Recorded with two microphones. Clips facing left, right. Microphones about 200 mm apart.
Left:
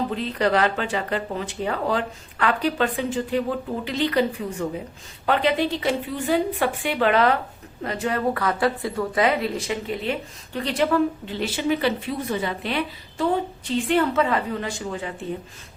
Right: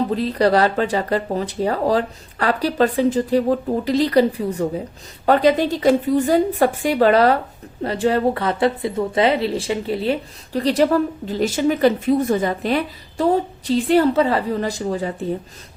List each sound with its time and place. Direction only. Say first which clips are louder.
0.1 s a woman's voice: right 5 dB; 35° right (ahead or behind)